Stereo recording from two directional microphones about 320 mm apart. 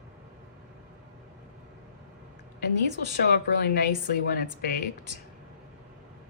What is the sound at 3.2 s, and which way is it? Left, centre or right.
Speech, left.